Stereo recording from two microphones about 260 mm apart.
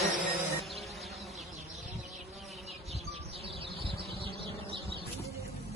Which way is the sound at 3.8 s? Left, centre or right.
Right.